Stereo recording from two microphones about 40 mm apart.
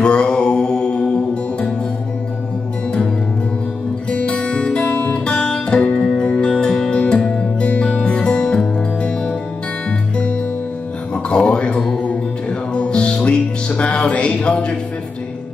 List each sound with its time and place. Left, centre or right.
0.0 s mantra: left
4.1 s music: left
7.6 s music: left
9.8 s music: left
11.2 s a sound: left
12.0 s music: left